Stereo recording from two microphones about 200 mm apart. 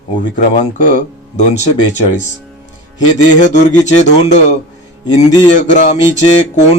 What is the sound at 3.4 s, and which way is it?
Speech, 35° left (ahead or behind).